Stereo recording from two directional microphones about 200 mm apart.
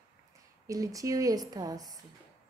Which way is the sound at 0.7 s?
15° right (ahead or behind).